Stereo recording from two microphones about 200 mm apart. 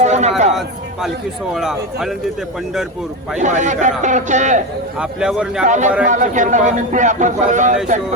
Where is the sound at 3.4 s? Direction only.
35° right (ahead or behind).